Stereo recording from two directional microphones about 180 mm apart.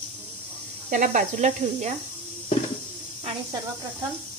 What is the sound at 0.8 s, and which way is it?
Speech, 45° right (ahead or behind).